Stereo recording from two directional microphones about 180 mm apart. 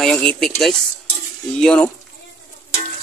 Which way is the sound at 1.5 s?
5° left (ahead or behind).